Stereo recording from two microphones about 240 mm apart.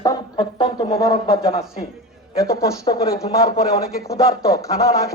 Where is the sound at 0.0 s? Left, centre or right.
Centre.